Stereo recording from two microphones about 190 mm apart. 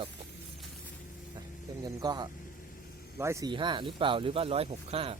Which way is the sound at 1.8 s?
20° right (ahead or behind).